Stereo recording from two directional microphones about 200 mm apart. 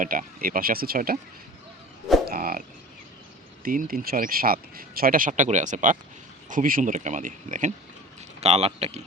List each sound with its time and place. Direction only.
0.0 s speech: 45° right (ahead or behind)
2.3 s speech: 50° right (ahead or behind)
8.4 s speech: 30° right (ahead or behind)